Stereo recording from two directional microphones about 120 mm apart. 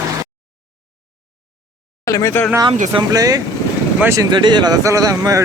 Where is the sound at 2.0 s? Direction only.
25° left (ahead or behind).